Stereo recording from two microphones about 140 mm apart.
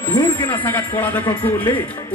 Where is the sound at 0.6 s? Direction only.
15° left (ahead or behind).